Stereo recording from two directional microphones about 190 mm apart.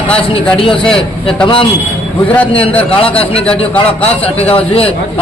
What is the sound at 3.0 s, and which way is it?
Speech, 30° left (ahead or behind).